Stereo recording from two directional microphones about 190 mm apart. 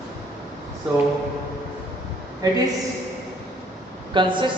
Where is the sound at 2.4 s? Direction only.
20° right (ahead or behind).